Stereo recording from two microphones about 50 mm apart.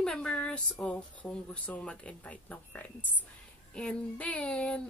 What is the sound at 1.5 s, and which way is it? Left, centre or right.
A woman's voice, left.